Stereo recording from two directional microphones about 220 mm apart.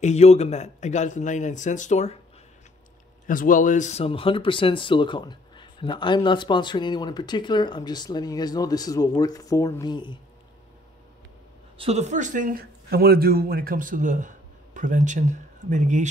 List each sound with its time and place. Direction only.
0.0 s a man's voice: 30° left (ahead or behind)
3.3 s speech: 40° left (ahead or behind); by 10.1 s 20° left (ahead or behind)
11.8 s speech: 30° right (ahead or behind)